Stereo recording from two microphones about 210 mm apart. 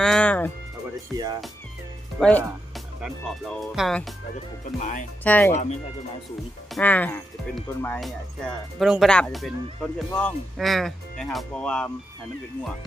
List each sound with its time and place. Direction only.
0.0 s music: 5° left (ahead or behind)
1.1 s speech: 20° right (ahead or behind)
2.1 s speech: centre (ahead or behind)
4.8 s speech: 35° left (ahead or behind)
5.2 s speech: 10° left (ahead or behind)
6.7 s speech: 5° left (ahead or behind)